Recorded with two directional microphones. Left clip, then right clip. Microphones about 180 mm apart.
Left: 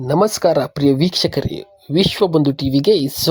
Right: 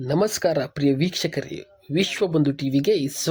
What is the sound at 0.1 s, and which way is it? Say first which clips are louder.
Speech: left 7 dB; 20° left (ahead or behind).